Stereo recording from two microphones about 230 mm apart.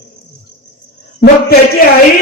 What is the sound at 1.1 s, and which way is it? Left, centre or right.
Speech, left.